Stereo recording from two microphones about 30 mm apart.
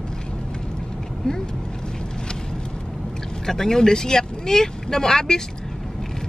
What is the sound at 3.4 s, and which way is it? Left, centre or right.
Speech, centre.